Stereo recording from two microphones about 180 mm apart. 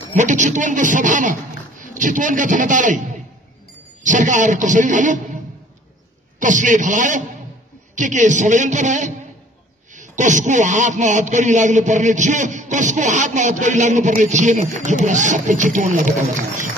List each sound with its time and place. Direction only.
0.1 s a man's voice: 45° right (ahead or behind)
4.0 s a man's voice: 45° right (ahead or behind)
6.4 s a man's voice: 45° right (ahead or behind)